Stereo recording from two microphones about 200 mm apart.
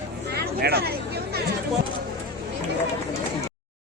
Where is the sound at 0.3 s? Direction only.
55° right (ahead or behind).